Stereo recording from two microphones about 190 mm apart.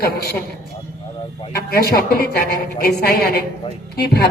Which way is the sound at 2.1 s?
50° left (ahead or behind).